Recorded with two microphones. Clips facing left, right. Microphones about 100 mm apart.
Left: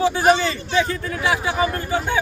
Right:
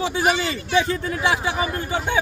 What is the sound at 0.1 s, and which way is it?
Speech, 30° left (ahead or behind).